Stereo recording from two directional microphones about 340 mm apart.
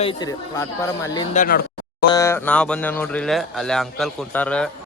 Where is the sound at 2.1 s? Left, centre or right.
Centre.